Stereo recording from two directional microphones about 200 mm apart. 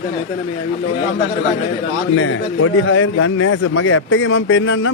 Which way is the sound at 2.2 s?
85° left.